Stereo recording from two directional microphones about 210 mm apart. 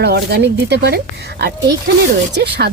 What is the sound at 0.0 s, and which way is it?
Speech, 50° right (ahead or behind).